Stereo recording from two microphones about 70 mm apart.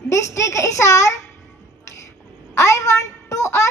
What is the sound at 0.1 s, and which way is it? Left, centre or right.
A child's voice, left.